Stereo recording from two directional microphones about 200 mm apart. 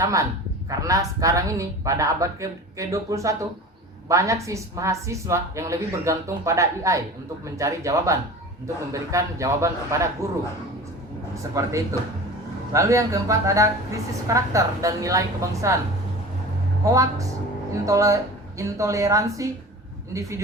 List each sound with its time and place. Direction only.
0.0 s a woman's voice: 15° right (ahead or behind)
11.5 s a woman's voice: 15° right (ahead or behind)
16.9 s a woman's voice: 15° right (ahead or behind)